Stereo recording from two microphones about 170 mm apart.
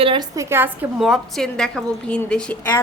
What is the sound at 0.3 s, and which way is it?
Speech, 15° right (ahead or behind).